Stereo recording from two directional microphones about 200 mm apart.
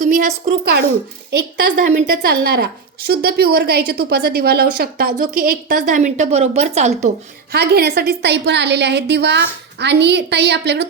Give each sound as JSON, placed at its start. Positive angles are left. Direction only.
{"t": 0.0, "sound": "a woman's voice", "side_deg": -40}
{"t": 7.5, "sound": "a woman's voice", "side_deg": -55}